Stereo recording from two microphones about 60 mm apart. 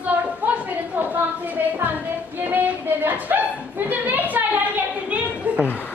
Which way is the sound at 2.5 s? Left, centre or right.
Right.